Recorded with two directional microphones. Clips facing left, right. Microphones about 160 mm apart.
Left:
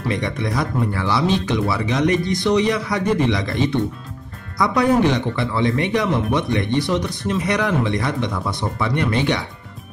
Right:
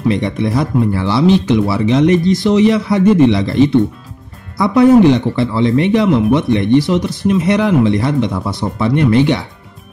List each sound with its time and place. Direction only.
0.1 s speech: 25° right (ahead or behind)
4.6 s speech: 25° right (ahead or behind)